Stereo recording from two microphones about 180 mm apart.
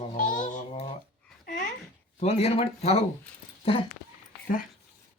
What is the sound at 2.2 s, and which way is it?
Speech, 35° left (ahead or behind).